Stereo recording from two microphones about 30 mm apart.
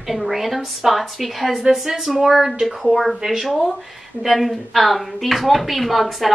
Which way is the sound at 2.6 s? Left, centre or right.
Centre.